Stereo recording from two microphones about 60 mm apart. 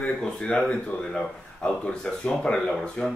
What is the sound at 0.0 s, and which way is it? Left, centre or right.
Speech, centre.